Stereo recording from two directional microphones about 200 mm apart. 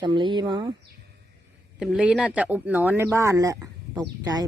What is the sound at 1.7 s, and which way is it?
Speech, centre (ahead or behind).